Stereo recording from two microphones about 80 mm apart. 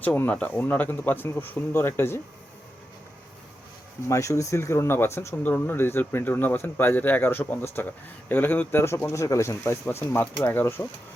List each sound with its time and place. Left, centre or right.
0.0 s speech: centre
4.1 s speech: left
5.4 s speech: left